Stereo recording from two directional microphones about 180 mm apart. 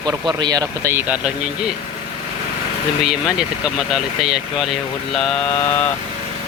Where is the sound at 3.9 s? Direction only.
Centre (ahead or behind).